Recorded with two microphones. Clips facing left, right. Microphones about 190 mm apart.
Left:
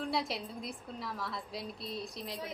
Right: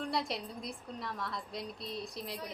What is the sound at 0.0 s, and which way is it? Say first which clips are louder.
A woman's voice: left 1 dB; centre (ahead or behind).